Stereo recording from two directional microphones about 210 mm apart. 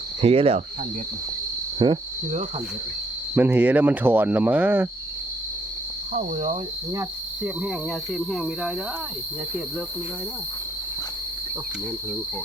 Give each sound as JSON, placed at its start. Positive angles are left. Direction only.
{"t": 0.2, "sound": "cricket", "side_deg": -30}
{"t": 1.8, "sound": "cricket", "side_deg": -25}
{"t": 3.3, "sound": "speech", "side_deg": -10}
{"t": 6.1, "sound": "speech", "side_deg": -35}
{"t": 8.3, "sound": "speech", "side_deg": 0}